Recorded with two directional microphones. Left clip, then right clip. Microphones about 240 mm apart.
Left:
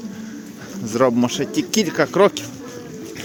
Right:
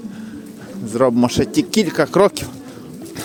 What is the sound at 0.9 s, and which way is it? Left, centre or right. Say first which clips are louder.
Speech: right 2 dB; centre.